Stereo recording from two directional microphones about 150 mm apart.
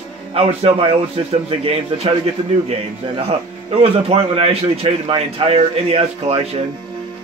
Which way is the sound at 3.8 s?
40° right (ahead or behind).